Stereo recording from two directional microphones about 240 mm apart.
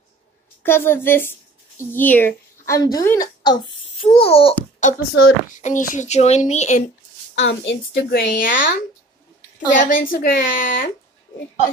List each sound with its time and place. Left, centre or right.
0.7 s a woman's voice: centre; by 6.8 s left
7.3 s speech: left